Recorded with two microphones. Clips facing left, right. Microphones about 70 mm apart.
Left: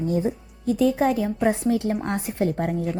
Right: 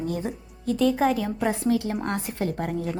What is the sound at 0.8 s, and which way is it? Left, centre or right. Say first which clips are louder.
Speech: left 1 dB; centre.